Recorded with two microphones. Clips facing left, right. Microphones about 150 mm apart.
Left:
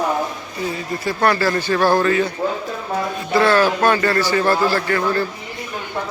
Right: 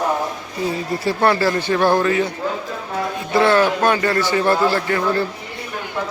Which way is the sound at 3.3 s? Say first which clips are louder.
Even; 20° right (ahead or behind).